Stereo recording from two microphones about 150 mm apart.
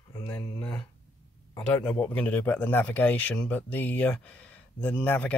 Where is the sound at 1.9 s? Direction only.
10° left (ahead or behind).